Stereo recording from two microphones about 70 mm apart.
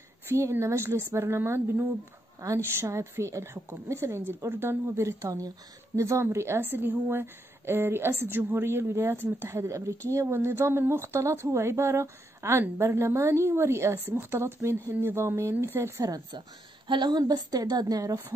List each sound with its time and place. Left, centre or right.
0.3 s a woman's voice: right
6.2 s speech: right
16.0 s a woman's voice: right
17.2 s a woman's voice: right